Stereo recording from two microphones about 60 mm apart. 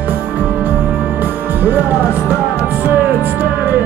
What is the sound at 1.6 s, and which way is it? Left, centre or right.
Music, right.